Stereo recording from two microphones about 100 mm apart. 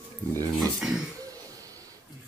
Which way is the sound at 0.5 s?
5° right (ahead or behind).